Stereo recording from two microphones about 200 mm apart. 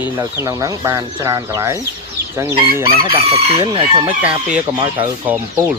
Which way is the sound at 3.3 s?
25° right (ahead or behind).